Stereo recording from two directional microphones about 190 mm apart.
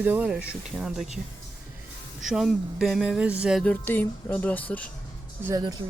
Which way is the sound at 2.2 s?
Centre (ahead or behind).